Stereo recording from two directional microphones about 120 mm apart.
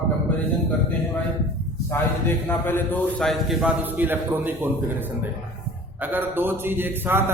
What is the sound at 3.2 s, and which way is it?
Speech, 5° left (ahead or behind).